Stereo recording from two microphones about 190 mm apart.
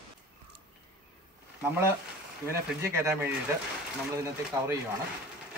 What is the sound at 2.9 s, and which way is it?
Speech, 10° right (ahead or behind).